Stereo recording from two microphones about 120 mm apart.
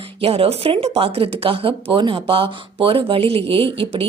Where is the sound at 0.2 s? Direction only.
55° right (ahead or behind).